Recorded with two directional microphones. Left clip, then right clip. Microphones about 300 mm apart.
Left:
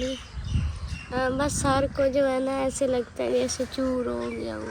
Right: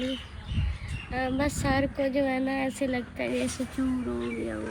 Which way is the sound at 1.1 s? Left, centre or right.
Centre.